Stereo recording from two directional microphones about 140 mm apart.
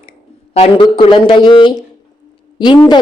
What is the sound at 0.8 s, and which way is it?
Speech, 35° left (ahead or behind).